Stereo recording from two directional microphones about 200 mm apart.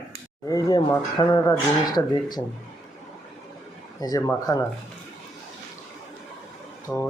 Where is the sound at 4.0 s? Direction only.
20° left (ahead or behind).